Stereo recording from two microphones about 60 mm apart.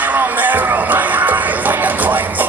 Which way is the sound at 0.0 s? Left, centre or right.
Right.